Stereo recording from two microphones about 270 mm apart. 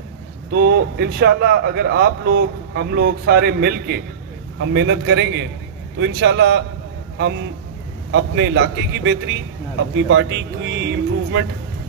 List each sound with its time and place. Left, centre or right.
0.5 s speech: right
8.1 s speech: right